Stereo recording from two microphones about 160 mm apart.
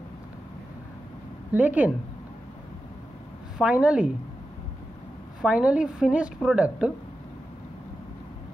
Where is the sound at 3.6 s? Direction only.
5° right (ahead or behind).